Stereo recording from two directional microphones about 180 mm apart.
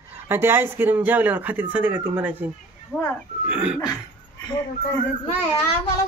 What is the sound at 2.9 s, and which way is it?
Speech, 10° left (ahead or behind).